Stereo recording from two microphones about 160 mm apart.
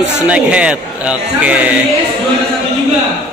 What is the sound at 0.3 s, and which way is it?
A man's voice, 5° right (ahead or behind).